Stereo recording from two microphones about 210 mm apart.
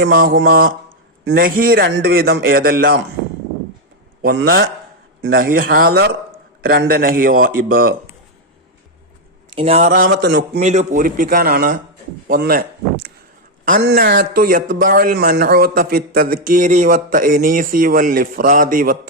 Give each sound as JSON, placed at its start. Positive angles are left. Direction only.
{"t": 0.1, "sound": "speech", "side_deg": -45}
{"t": 4.3, "sound": "speech", "side_deg": -50}
{"t": 9.5, "sound": "speech", "side_deg": -25}
{"t": 10.1, "sound": "a man's voice", "side_deg": -60}
{"t": 10.6, "sound": "speech", "side_deg": -35}
{"t": 13.8, "sound": "speech", "side_deg": -50}